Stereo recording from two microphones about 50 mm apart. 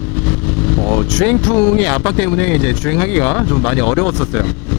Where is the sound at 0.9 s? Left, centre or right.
Left.